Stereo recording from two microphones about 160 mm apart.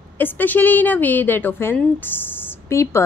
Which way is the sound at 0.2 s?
10° left (ahead or behind).